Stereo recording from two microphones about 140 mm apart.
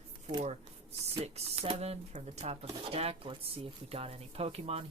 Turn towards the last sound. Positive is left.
turn(degrees=-45)  # may be behind; listen again after turning